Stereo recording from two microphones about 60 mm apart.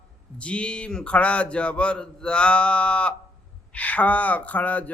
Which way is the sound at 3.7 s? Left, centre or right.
Left.